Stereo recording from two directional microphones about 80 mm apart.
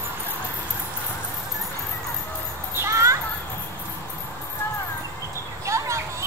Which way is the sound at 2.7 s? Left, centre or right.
Right.